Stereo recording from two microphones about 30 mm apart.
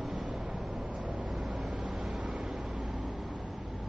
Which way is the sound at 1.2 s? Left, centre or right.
Centre.